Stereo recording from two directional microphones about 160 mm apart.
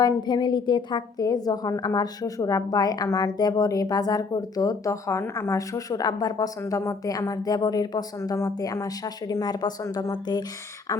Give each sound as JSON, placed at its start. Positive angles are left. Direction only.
{"t": 0.0, "sound": "a woman's voice", "side_deg": 25}